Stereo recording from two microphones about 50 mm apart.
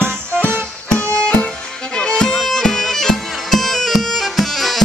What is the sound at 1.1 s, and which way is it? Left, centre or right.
Music, centre.